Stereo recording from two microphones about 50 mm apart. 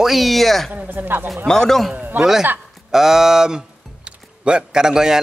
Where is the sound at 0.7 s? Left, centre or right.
Right.